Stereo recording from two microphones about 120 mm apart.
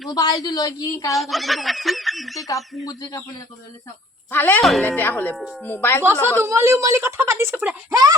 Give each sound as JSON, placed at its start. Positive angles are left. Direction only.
{"t": 0.1, "sound": "a woman's voice", "side_deg": 30}
{"t": 1.1, "sound": "speech", "side_deg": 0}
{"t": 2.5, "sound": "a woman's voice", "side_deg": 30}
{"t": 4.3, "sound": "speech", "side_deg": 15}
{"t": 5.4, "sound": "speech", "side_deg": 0}
{"t": 5.6, "sound": "speech", "side_deg": 20}
{"t": 6.4, "sound": "speech", "side_deg": -25}